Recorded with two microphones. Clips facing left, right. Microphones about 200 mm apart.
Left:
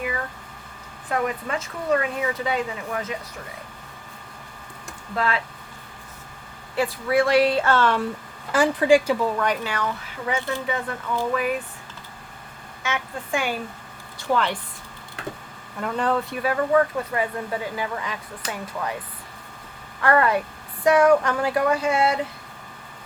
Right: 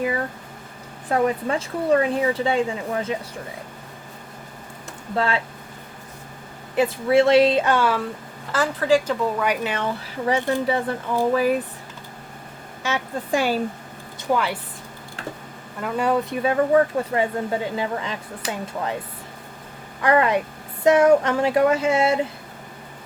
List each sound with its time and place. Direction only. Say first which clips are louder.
1.1 s a woman's voice: right 5 dB; 30° right (ahead or behind)
5.1 s a woman's voice: right 2 dB; 30° right (ahead or behind)
6.7 s a woman's voice: right 4 dB; 25° right (ahead or behind); by 8.0 s 10° right (ahead or behind)
8.5 s speech: left 2 dB; 15° left (ahead or behind)
9.2 s speech: right 1 dB; 10° right (ahead or behind)
9.6 s speech: right 2 dB; 25° right (ahead or behind)
12.8 s speech: right 3 dB; 35° right (ahead or behind)
14.2 s speech: right 1 dB; 10° right (ahead or behind)
15.8 s speech: right 2 dB; 10° right (ahead or behind)
16.4 s a woman's voice: right 2 dB; 25° right (ahead or behind)
20.0 s a woman's voice: right 1 dB; 15° right (ahead or behind)